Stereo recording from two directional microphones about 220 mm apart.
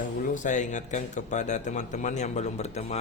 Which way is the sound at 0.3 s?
35° left (ahead or behind).